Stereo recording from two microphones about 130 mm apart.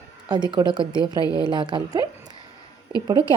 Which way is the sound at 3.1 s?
40° right (ahead or behind).